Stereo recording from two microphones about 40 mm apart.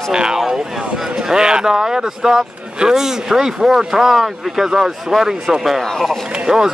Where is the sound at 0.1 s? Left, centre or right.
Centre.